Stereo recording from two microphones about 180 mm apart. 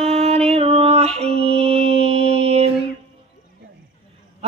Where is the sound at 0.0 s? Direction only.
35° right (ahead or behind).